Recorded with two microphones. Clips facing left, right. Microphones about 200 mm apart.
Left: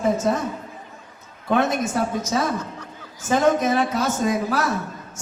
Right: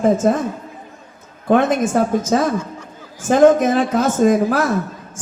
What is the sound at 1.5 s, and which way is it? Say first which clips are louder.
A woman's voice: right 6 dB; 50° right (ahead or behind).